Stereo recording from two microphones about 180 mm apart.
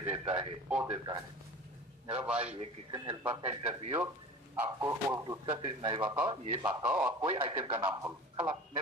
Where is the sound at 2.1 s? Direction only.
5° right (ahead or behind).